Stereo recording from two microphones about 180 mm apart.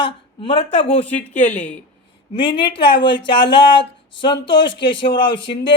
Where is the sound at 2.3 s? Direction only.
25° left (ahead or behind).